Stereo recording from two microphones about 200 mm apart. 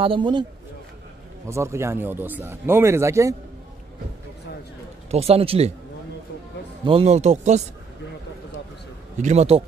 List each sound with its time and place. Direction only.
0.0 s a man's voice: 25° right (ahead or behind)
1.5 s speech: 15° right (ahead or behind)
5.1 s speech: 30° right (ahead or behind)
6.8 s speech: 30° right (ahead or behind)
9.2 s speech: 35° right (ahead or behind)